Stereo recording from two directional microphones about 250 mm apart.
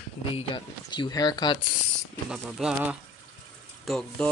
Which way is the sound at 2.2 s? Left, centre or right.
Centre.